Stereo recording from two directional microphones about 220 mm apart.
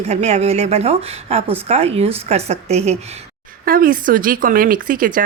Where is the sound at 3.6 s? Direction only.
40° right (ahead or behind).